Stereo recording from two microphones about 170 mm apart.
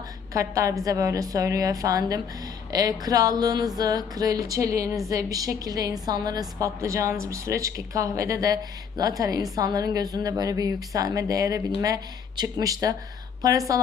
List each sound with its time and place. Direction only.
0.3 s a woman's voice: 20° right (ahead or behind)